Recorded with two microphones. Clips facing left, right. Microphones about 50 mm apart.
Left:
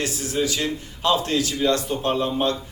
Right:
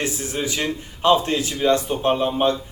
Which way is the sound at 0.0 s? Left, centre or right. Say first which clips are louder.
Left 1 dB; right.